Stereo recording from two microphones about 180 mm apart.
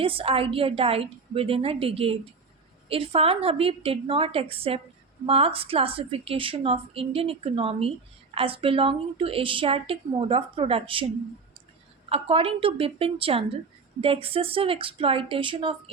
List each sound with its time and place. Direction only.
0.0 s a woman's voice: 30° right (ahead or behind)
12.0 s a woman's voice: 30° right (ahead or behind)